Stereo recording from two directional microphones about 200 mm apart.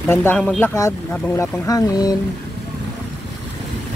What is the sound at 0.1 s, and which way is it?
Speech, 10° left (ahead or behind).